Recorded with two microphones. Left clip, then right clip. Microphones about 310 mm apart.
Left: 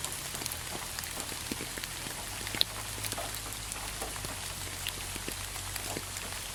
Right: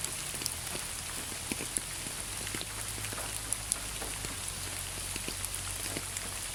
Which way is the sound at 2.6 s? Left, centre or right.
Left.